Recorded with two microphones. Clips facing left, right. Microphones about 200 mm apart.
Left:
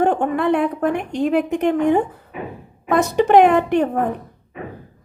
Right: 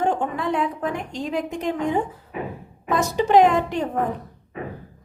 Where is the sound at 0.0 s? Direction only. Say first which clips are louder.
Left 6 dB; 60° left (ahead or behind).